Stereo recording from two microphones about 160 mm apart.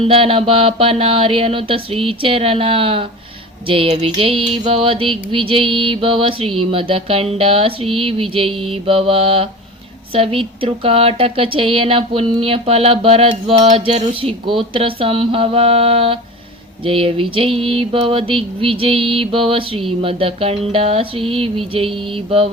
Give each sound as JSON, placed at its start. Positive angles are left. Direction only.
{"t": 0.0, "sound": "speech", "side_deg": -35}